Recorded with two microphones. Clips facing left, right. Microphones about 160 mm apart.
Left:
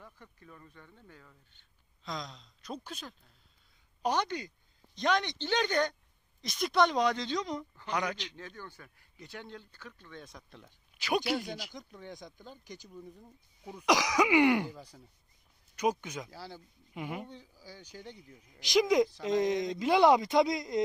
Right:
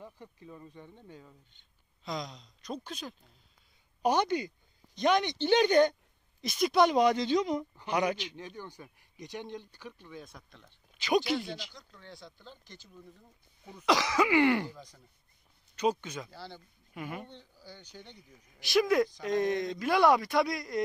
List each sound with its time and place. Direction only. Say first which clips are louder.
0.0 s speech: right 6 dB; 20° right (ahead or behind)
2.0 s speech: right 3 dB; 5° right (ahead or behind)
4.0 s speech: right 4 dB; 10° right (ahead or behind)
10.2 s speech: left 1 dB; centre (ahead or behind)
16.9 s speech: left 1 dB; 15° left (ahead or behind)
18.6 s speech: even; 15° left (ahead or behind)